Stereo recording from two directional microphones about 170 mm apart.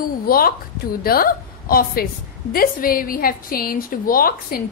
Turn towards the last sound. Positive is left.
turn(degrees=60)  # may be behind; listen again after turning